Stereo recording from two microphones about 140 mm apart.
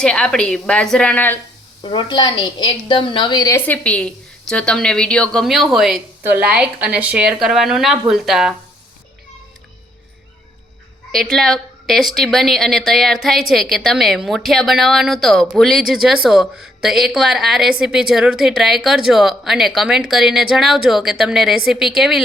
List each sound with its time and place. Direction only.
0.0 s a woman's voice: 5° left (ahead or behind)
1.8 s a woman's voice: 35° left (ahead or behind)
3.5 s a woman's voice: 10° left (ahead or behind)
6.2 s a woman's voice: 10° right (ahead or behind)
11.1 s a woman's voice: 5° left (ahead or behind)